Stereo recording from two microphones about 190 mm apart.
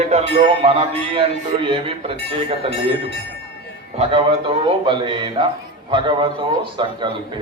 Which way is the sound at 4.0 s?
30° right (ahead or behind).